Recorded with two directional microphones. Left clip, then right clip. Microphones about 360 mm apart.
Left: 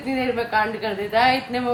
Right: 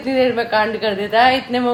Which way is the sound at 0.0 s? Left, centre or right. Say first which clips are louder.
Right 7 dB; centre.